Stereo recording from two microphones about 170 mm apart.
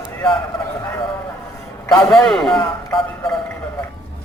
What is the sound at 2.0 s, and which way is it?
A man's voice, 5° left (ahead or behind).